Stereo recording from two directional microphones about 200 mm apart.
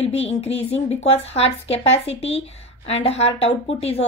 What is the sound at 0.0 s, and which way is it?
A woman's voice, 30° left (ahead or behind).